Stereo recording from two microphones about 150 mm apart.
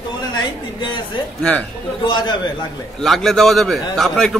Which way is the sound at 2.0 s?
30° left (ahead or behind).